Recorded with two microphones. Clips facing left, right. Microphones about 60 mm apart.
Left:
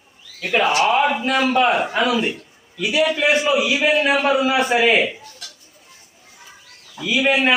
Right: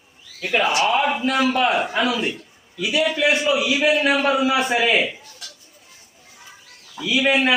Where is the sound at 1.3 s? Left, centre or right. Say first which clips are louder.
Left 2 dB; left.